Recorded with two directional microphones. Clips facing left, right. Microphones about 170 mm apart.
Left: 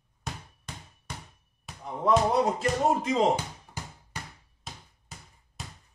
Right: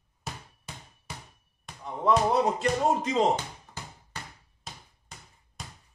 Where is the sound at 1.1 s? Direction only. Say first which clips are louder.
Left 1 dB; 5° right (ahead or behind).